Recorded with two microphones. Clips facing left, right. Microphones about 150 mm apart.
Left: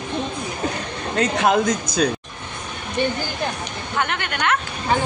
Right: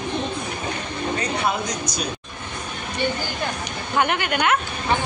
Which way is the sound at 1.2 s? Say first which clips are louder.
Left 10 dB; 90° left.